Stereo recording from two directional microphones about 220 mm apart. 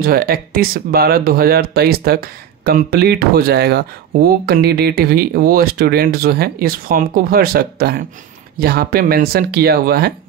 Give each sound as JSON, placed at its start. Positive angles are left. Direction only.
{"t": 0.0, "sound": "speech", "side_deg": -45}